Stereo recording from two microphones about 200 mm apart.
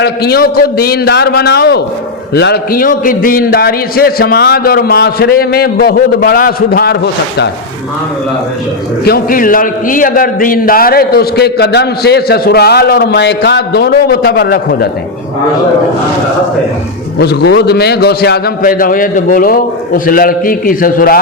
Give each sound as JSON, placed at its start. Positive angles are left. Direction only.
{"t": 0.0, "sound": "a man's voice", "side_deg": 50}
{"t": 9.0, "sound": "a man's voice", "side_deg": 50}
{"t": 17.2, "sound": "a man's voice", "side_deg": 55}